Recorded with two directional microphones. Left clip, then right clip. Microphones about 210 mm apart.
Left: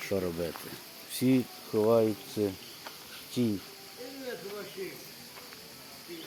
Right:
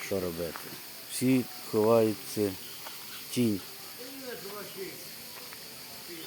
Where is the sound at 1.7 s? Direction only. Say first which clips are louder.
Right 1 dB; centre (ahead or behind).